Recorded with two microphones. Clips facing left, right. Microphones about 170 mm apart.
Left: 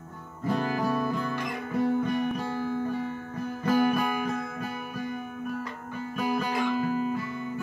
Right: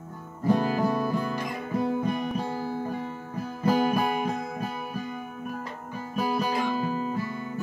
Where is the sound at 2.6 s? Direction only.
35° right (ahead or behind).